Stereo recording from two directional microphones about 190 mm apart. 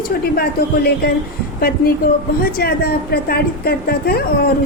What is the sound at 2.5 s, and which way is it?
A woman's voice, 55° left (ahead or behind).